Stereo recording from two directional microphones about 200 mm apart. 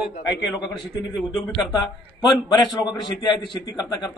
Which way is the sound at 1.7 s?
20° left (ahead or behind).